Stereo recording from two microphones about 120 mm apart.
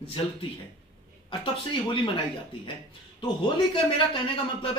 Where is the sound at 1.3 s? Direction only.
45° left (ahead or behind).